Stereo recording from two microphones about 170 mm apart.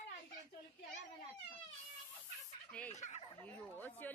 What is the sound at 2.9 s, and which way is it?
Fowl, 45° left (ahead or behind).